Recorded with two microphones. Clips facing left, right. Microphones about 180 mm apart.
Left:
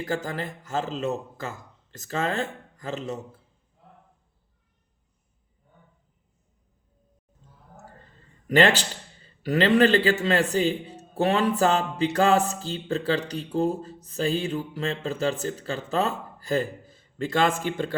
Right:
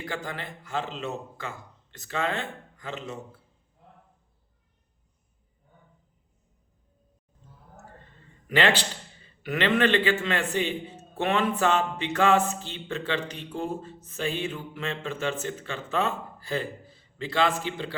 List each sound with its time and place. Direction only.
0.0 s a man's voice: 40° left (ahead or behind)
8.4 s a man's voice: 40° left (ahead or behind)